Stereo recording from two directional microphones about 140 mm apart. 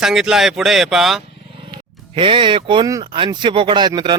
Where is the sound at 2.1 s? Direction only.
35° right (ahead or behind).